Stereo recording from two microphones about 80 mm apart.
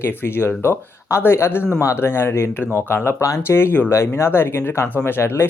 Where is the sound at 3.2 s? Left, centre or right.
Left.